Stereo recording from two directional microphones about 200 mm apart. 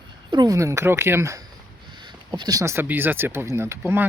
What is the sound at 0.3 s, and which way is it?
Speech, 20° right (ahead or behind).